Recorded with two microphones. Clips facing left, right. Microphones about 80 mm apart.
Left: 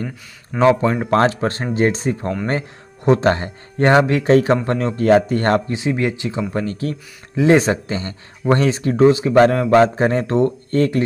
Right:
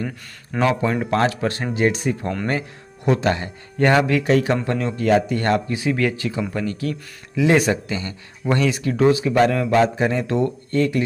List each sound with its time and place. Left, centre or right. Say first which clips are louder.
0.6 s speech: left 5 dB; left
1.1 s speech: left 6 dB; left
3.9 s speech: left 5 dB; left
5.7 s speech: left 1 dB; left
6.5 s speech: left 2 dB; left